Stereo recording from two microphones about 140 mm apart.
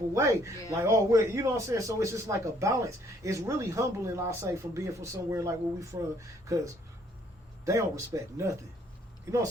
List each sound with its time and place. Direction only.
0.1 s a man's voice: 20° right (ahead or behind)